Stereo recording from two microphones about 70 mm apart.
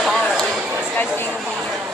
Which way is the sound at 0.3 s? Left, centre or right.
Centre.